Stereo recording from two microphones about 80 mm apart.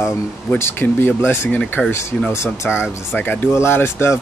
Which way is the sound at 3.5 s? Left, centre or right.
Left.